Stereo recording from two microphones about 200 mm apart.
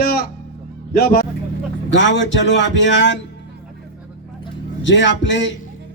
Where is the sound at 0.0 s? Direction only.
50° left (ahead or behind).